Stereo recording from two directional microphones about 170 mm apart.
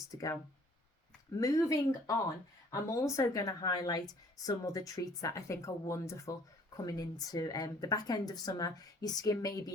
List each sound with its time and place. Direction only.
0.1 s speech: 20° left (ahead or behind)
1.4 s speech: 20° left (ahead or behind)